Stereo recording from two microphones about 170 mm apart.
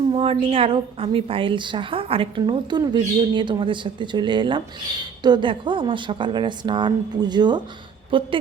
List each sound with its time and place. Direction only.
0.1 s a woman's voice: 35° right (ahead or behind)